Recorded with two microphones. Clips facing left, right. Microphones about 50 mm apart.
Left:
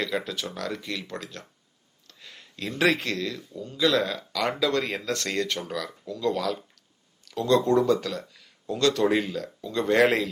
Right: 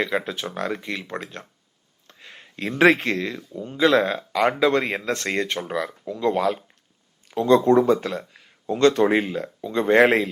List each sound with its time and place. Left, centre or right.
0.0 s speech: right